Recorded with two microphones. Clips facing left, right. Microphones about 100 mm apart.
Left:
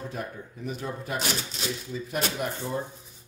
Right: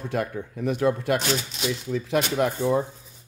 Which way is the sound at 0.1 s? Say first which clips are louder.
Right 8 dB; 90° right.